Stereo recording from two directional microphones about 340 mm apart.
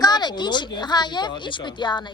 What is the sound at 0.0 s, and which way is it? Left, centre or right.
Speech, centre.